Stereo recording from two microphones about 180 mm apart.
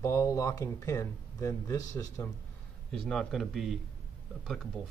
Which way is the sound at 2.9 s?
Centre (ahead or behind).